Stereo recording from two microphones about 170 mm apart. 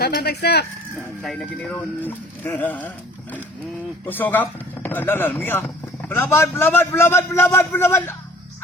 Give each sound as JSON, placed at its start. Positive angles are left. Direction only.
{"t": 0.0, "sound": "speech", "side_deg": 65}
{"t": 0.9, "sound": "speech", "side_deg": 0}
{"t": 4.0, "sound": "speech", "side_deg": 10}